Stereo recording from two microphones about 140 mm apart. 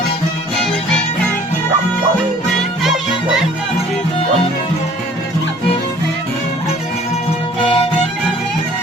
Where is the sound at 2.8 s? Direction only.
Centre (ahead or behind).